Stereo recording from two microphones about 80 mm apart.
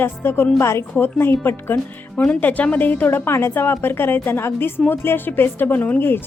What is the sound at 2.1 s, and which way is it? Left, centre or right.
A woman's voice, centre.